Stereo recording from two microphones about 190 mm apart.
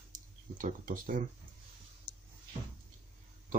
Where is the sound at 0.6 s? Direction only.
45° right (ahead or behind).